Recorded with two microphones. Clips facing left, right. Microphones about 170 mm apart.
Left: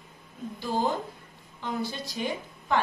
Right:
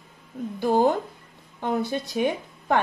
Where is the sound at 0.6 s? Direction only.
55° right (ahead or behind).